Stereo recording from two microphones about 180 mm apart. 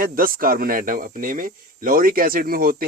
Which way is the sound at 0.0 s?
55° right (ahead or behind).